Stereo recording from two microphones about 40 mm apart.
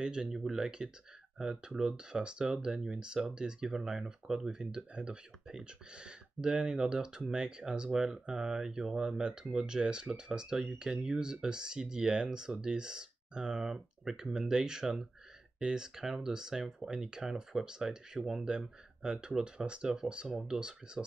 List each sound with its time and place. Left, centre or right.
0.0 s speech: centre